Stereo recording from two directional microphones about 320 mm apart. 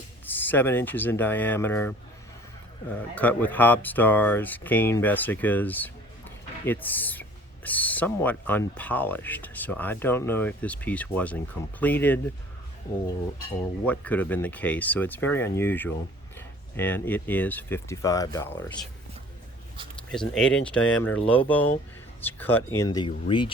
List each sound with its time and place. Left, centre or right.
0.3 s speech: centre
13.8 s speech: centre
20.1 s speech: centre